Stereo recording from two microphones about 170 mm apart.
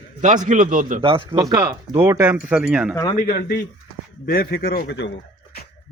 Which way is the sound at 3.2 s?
60° left (ahead or behind).